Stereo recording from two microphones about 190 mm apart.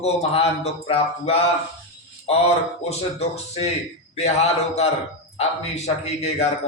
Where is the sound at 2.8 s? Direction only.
35° left (ahead or behind).